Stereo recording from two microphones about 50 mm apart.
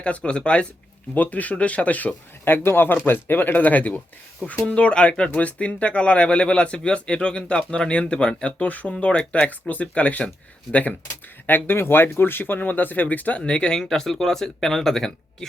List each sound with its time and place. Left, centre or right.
0.0 s speech: left
1.1 s speech: left
2.4 s speech: left; by 8.6 s centre
8.6 s speech: left
8.9 s speech: left
11.4 s speech: left; by 15.4 s centre